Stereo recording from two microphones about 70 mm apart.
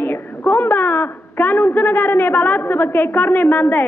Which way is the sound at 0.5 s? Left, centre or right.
Left.